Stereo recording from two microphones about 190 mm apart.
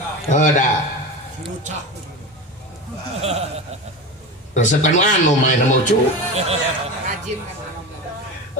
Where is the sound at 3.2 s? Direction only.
35° right (ahead or behind).